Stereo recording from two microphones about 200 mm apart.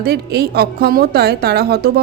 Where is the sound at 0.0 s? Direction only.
50° right (ahead or behind).